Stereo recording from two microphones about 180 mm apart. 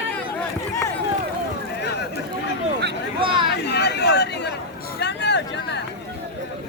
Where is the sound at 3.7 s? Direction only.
70° left (ahead or behind).